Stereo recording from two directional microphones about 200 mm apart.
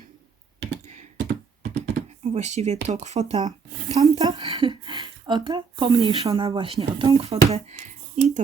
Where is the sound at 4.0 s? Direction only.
20° right (ahead or behind).